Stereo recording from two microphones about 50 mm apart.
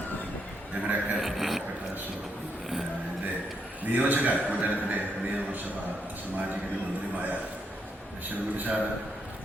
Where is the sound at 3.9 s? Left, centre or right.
Right.